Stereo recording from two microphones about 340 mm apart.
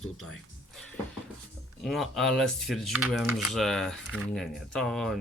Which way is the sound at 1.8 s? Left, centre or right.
Centre.